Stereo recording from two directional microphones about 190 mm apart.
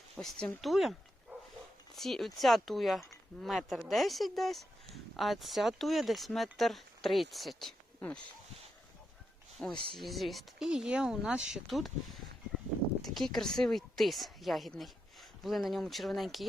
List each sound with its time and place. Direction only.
0.2 s speech: 5° left (ahead or behind)
9.6 s a woman's voice: 5° left (ahead or behind)